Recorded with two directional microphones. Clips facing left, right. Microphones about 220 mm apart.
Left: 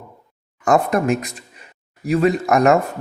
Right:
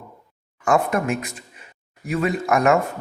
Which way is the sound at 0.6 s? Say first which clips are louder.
Left 3 dB; 35° left (ahead or behind).